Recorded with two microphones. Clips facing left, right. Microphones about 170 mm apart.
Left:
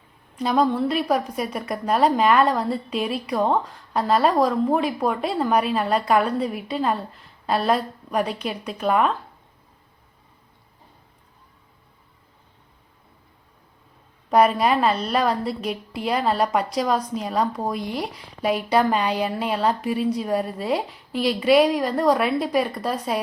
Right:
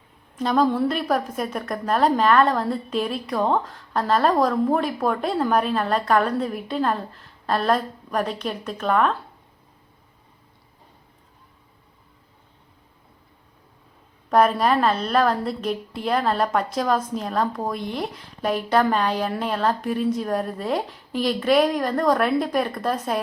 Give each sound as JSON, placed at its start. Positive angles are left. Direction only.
{"t": 0.3, "sound": "a woman's voice", "side_deg": 0}
{"t": 14.3, "sound": "a woman's voice", "side_deg": 5}
{"t": 20.7, "sound": "a woman's voice", "side_deg": -45}
{"t": 21.2, "sound": "a woman's voice", "side_deg": 5}